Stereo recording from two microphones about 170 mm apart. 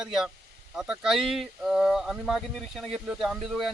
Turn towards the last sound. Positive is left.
turn(degrees=0)  # may be behind; listen again after turning